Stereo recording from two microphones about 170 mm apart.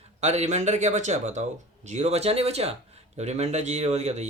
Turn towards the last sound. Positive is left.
turn(degrees=-40)  # may be behind; listen again after turning